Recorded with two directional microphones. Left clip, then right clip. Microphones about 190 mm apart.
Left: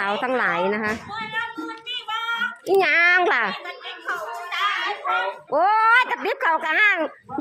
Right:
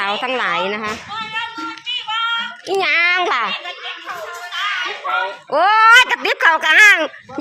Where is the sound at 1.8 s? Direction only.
60° left (ahead or behind).